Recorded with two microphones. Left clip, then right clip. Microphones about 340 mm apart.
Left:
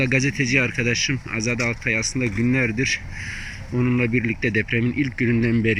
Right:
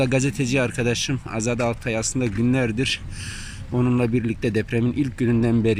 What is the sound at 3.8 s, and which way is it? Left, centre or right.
Speech, centre.